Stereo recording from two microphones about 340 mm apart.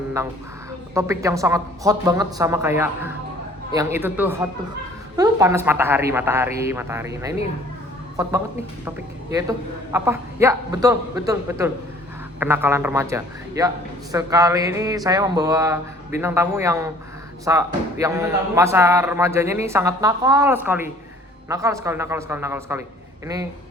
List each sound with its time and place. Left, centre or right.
0.9 s speech: centre